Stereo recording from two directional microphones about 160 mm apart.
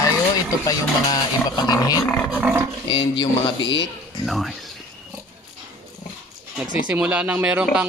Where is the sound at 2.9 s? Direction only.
30° left (ahead or behind).